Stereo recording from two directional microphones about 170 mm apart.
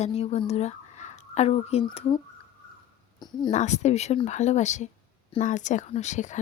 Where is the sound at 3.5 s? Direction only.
45° left (ahead or behind).